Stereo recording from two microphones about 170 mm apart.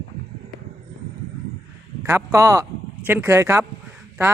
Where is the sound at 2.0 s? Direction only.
15° right (ahead or behind).